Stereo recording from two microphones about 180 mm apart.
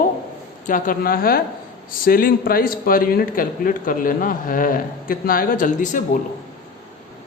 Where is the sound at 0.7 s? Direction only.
50° left (ahead or behind).